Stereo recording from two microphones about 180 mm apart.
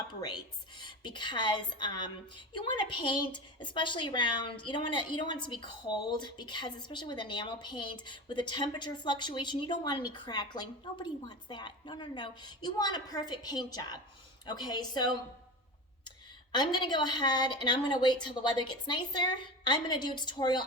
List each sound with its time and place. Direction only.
0.8 s a woman's voice: 25° left (ahead or behind)
16.5 s a woman's voice: 25° left (ahead or behind)